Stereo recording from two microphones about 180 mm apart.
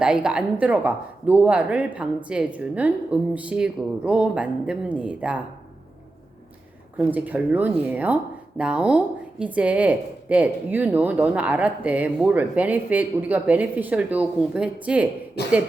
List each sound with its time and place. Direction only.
0.0 s speech: 5° right (ahead or behind)
6.9 s speech: 10° right (ahead or behind)
15.4 s speech: 65° left (ahead or behind)